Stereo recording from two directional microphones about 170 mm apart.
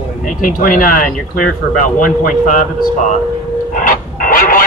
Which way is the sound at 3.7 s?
50° left (ahead or behind).